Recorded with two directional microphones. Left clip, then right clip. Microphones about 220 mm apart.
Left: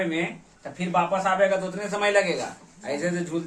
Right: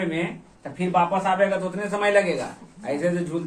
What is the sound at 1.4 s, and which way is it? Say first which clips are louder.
A man's voice: even; 20° left (ahead or behind).